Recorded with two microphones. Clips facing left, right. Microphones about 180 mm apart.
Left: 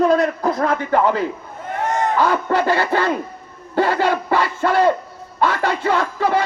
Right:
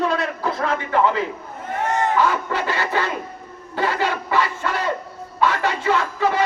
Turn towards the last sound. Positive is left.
turn(degrees=45)  # may be behind; listen again after turning